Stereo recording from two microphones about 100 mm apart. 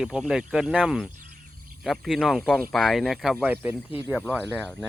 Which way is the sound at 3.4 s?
15° right (ahead or behind).